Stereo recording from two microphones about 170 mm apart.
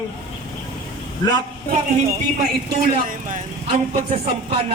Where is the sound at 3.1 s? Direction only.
50° right (ahead or behind).